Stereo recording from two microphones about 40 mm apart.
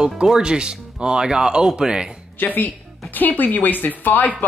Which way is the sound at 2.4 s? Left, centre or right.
Left.